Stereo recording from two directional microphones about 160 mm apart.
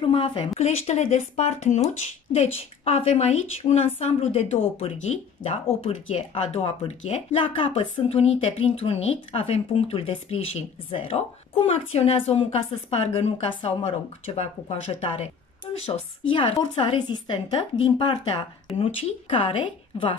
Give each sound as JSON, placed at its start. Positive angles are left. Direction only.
{"t": 0.0, "sound": "a woman's voice", "side_deg": 35}